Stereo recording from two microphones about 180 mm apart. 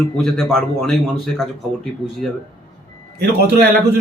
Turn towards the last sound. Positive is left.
turn(degrees=-60)  # may be behind; listen again after turning